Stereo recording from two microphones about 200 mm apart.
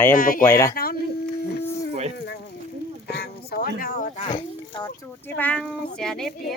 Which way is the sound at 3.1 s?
50° left (ahead or behind).